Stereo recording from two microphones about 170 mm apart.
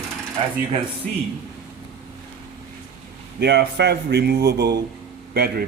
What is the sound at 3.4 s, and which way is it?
A man's voice, 75° right (ahead or behind).